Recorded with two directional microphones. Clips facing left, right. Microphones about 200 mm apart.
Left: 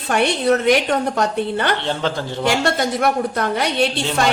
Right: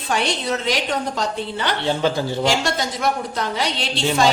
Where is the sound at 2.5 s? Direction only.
55° left (ahead or behind).